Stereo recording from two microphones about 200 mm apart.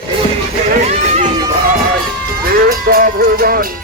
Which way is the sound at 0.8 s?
35° right (ahead or behind).